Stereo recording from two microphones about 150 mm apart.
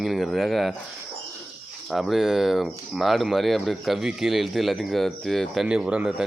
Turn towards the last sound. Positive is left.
turn(degrees=-5)  # may be behind; listen again after turning